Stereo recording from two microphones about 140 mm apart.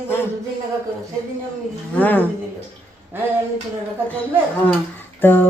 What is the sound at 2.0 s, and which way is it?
Speech, 10° left (ahead or behind).